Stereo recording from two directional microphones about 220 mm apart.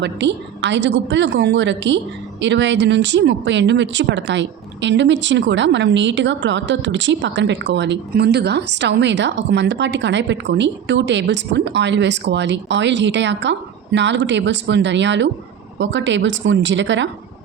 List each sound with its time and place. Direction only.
0.0 s a woman's voice: 55° right (ahead or behind)